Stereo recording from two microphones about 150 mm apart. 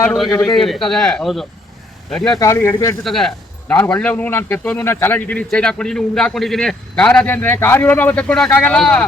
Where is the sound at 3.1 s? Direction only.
Centre (ahead or behind).